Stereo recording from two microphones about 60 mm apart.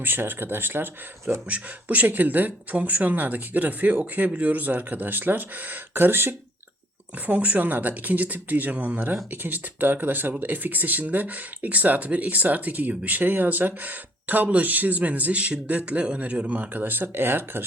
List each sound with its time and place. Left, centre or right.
0.0 s speech: right
1.5 s speech: right
7.3 s speech: right